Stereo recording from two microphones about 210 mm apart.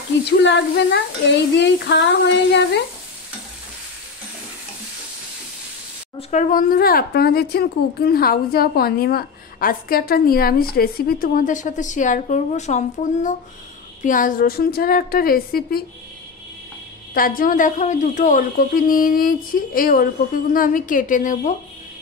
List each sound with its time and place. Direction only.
0.4 s stir: 55° left (ahead or behind)
1.9 s speech: 55° left (ahead or behind)
6.1 s speech: 35° left (ahead or behind)
17.1 s speech: 40° left (ahead or behind)